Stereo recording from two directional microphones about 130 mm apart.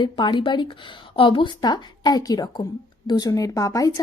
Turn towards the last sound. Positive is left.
turn(degrees=25)  # may be behind; listen again after turning